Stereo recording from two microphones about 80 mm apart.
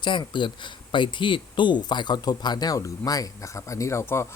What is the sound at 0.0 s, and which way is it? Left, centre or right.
Speech, left.